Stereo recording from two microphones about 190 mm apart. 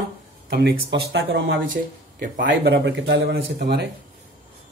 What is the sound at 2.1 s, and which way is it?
Speech, 45° right (ahead or behind).